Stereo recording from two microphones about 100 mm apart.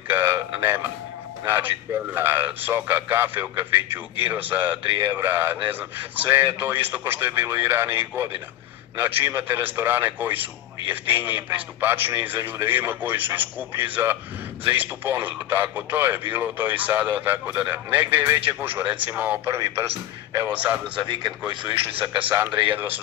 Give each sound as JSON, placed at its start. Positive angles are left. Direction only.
{"t": 0.1, "sound": "a man's voice", "side_deg": -25}
{"t": 19.4, "sound": "a man's voice", "side_deg": -25}
{"t": 21.0, "sound": "speech", "side_deg": -50}
{"t": 22.3, "sound": "a man's voice", "side_deg": -20}